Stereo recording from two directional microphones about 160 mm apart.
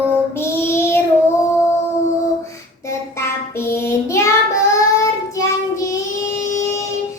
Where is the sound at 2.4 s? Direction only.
20° left (ahead or behind).